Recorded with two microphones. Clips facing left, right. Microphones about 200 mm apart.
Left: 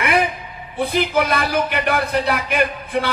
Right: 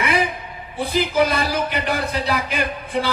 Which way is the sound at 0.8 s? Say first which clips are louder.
Even; 60° left (ahead or behind).